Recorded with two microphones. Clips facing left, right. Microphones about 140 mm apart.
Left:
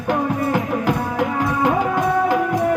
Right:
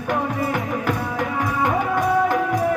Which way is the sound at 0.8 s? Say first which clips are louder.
Left 3 dB; 10° left (ahead or behind).